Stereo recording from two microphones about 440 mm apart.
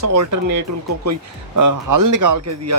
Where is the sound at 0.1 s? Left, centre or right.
Right.